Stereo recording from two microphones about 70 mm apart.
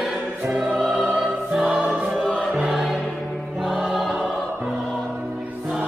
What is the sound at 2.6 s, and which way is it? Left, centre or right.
Music, centre.